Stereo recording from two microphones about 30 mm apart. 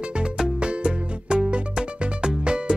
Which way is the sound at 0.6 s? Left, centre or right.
Right.